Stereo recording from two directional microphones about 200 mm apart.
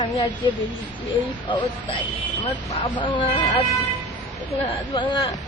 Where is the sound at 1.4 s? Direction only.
25° left (ahead or behind).